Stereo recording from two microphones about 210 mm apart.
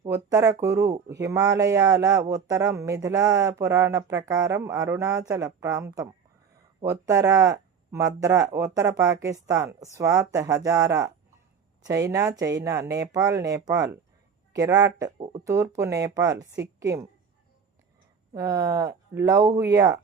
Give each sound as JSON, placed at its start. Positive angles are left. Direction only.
{"t": 0.0, "sound": "speech", "side_deg": -15}
{"t": 18.3, "sound": "speech", "side_deg": -15}